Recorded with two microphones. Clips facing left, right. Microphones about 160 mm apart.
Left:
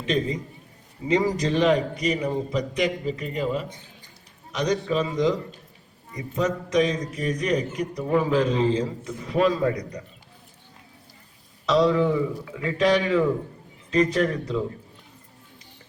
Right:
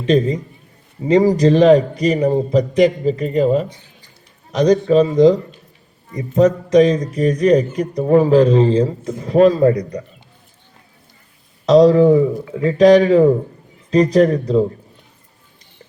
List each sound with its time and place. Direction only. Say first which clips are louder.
0.0 s a man's voice: right 9 dB; 35° right (ahead or behind)
11.6 s a man's voice: right 10 dB; 40° right (ahead or behind)